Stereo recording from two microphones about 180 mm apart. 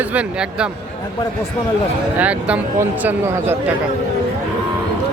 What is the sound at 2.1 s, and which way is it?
Speech, 10° right (ahead or behind).